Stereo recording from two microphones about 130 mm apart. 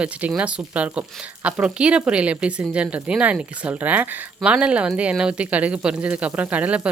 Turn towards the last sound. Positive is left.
turn(degrees=-10)  # may be behind; listen again after turning